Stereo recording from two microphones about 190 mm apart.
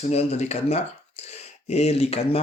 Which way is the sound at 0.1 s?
35° left (ahead or behind).